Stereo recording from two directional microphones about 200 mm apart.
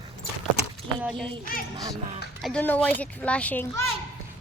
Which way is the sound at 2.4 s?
5° left (ahead or behind).